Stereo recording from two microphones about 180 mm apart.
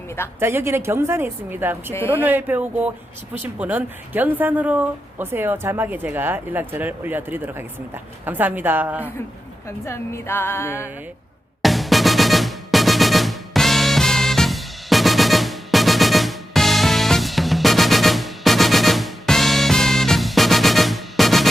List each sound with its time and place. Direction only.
0.3 s speech: 15° right (ahead or behind)
1.9 s a woman's voice: 15° left (ahead or behind)
2.1 s speech: 10° right (ahead or behind)
9.6 s a woman's voice: 15° left (ahead or behind)
11.6 s music: centre (ahead or behind)